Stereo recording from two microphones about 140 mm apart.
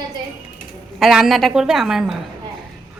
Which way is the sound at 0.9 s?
Centre (ahead or behind).